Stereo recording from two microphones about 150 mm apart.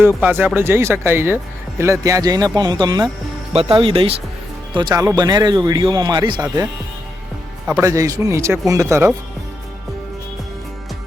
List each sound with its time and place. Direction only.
0.2 s speech: 10° right (ahead or behind); by 6.4 s 30° right (ahead or behind)
7.8 s speech: 20° right (ahead or behind)